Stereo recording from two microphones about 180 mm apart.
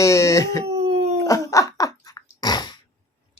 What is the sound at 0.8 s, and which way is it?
Dog, 35° right (ahead or behind).